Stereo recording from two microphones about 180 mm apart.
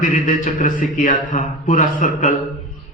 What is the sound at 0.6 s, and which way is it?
Speech, 50° left (ahead or behind).